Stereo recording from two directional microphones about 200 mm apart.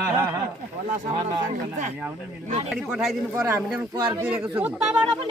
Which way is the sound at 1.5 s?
40° right (ahead or behind).